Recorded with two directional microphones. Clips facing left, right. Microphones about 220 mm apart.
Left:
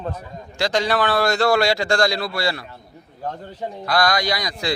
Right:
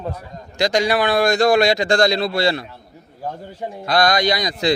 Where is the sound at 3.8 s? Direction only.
20° right (ahead or behind).